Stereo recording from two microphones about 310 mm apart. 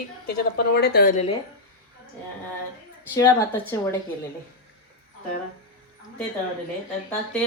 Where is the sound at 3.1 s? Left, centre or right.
Centre.